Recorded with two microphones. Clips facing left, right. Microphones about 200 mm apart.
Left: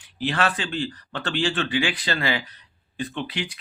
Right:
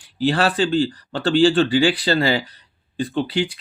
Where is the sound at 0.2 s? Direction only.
35° right (ahead or behind).